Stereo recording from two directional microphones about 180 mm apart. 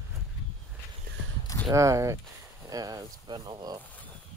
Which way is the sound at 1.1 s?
55° right (ahead or behind).